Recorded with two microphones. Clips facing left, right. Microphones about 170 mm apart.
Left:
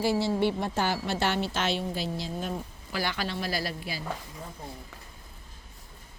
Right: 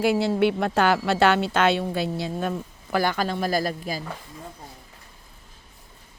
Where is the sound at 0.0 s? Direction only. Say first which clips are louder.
Right 5 dB; 65° right (ahead or behind).